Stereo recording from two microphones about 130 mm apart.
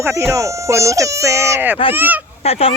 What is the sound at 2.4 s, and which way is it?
Goose, 50° left (ahead or behind).